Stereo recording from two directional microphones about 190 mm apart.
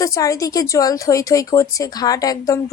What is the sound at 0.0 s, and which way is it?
Speech, 20° left (ahead or behind).